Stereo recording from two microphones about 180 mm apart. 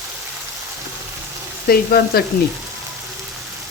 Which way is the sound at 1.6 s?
60° left (ahead or behind).